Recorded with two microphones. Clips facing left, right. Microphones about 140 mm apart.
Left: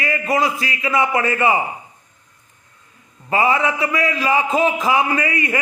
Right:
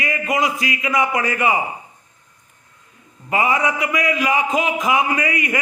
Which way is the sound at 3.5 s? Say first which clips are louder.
Left 1 dB; 15° right (ahead or behind).